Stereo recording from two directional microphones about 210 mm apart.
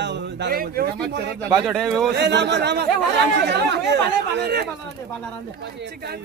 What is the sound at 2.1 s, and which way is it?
Speech, 55° right (ahead or behind).